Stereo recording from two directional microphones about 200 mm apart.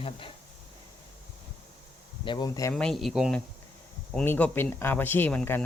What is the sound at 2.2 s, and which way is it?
Speech, 20° left (ahead or behind).